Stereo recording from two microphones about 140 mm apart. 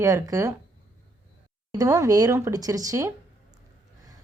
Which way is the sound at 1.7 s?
25° right (ahead or behind).